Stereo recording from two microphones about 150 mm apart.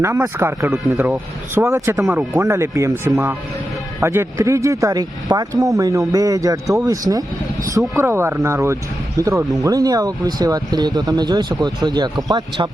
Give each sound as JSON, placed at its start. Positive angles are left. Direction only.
{"t": 0.0, "sound": "speech", "side_deg": -20}